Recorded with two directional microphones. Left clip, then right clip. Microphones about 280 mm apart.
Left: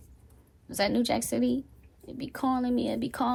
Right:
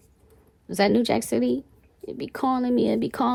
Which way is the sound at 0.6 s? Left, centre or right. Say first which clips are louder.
Right 6 dB; right.